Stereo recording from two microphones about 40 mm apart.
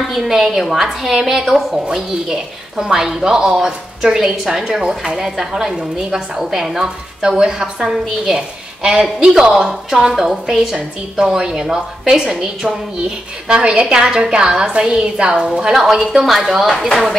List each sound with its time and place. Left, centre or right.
0.0 s speech: centre
11.2 s a woman's voice: centre
15.7 s speech: centre